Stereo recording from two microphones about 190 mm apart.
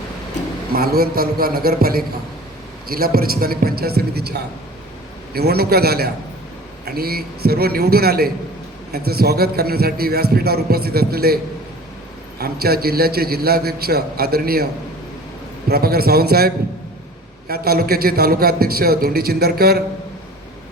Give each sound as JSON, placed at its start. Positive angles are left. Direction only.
{"t": 0.7, "sound": "a man's voice", "side_deg": -55}
{"t": 12.4, "sound": "a man's voice", "side_deg": -55}
{"t": 15.7, "sound": "a man's voice", "side_deg": -55}
{"t": 17.5, "sound": "a man's voice", "side_deg": -55}